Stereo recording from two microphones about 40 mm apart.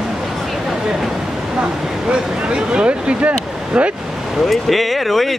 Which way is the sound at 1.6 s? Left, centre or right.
Centre.